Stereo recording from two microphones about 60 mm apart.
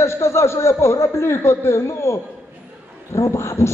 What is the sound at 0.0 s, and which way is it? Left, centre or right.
A woman's voice, left.